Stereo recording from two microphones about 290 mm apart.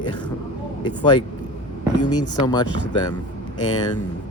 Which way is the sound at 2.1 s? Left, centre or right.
Centre.